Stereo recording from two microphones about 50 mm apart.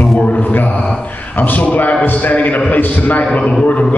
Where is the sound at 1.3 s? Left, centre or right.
Left.